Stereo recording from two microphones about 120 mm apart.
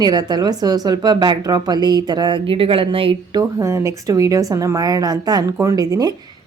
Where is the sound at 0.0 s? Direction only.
35° right (ahead or behind).